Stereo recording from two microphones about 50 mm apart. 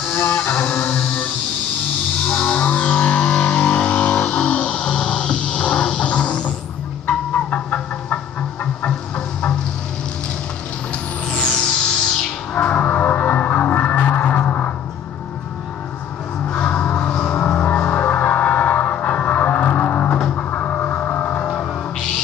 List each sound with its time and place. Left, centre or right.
0.1 s music: left
2.2 s music: centre
7.1 s fowl: left
8.8 s train: left
10.9 s a sound: centre
12.5 s music: left
16.4 s music: left